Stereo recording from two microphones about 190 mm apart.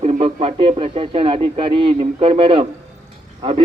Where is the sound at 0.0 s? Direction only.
35° right (ahead or behind).